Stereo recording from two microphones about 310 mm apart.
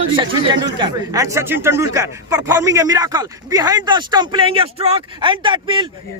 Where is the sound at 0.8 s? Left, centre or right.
Centre.